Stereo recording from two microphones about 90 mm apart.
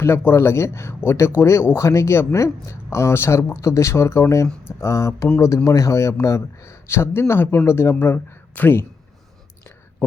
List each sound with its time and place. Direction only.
0.0 s a man's voice: 25° left (ahead or behind)